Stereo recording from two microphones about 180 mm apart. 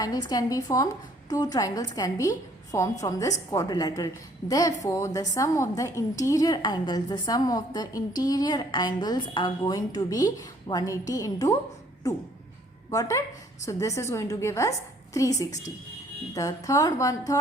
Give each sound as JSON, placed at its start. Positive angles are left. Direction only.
{"t": 0.0, "sound": "a woman's voice", "side_deg": 20}
{"t": 12.9, "sound": "a woman's voice", "side_deg": 20}